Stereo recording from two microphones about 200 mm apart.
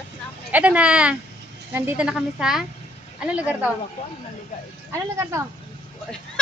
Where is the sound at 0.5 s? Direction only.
5° right (ahead or behind).